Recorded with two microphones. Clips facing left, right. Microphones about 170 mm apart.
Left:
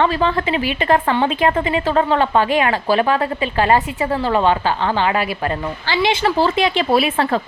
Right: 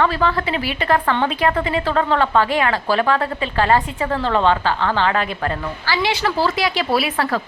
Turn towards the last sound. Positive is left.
turn(degrees=20)  # may be behind; listen again after turning